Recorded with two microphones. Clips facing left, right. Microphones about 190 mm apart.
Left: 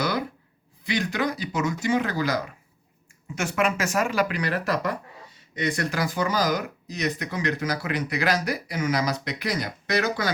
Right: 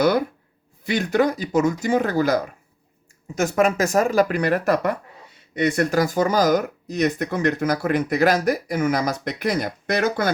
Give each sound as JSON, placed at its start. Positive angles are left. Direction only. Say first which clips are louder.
{"t": 0.0, "sound": "speech", "louder": "right 8 dB", "side_deg": -50}